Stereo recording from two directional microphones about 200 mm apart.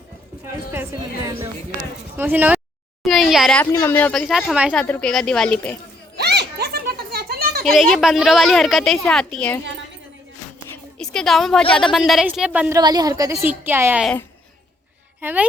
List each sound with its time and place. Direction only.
0.7 s a woman's voice: 10° right (ahead or behind)
3.0 s a sound: centre (ahead or behind)
3.7 s speech: 15° left (ahead or behind)
6.1 s a sound: 55° right (ahead or behind)
7.6 s speech: centre (ahead or behind)
10.9 s a woman's voice: 5° left (ahead or behind)
12.5 s a woman's voice: 10° right (ahead or behind)
14.0 s speech: 5° left (ahead or behind)
15.2 s a woman's voice: 10° right (ahead or behind)